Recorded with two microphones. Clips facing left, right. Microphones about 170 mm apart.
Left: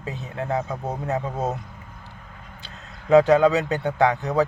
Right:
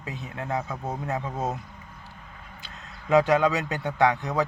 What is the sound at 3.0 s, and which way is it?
Speech, 30° left (ahead or behind).